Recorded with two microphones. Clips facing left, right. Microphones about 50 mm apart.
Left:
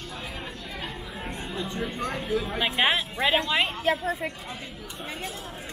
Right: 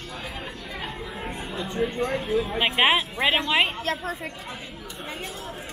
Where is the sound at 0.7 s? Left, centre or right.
Centre.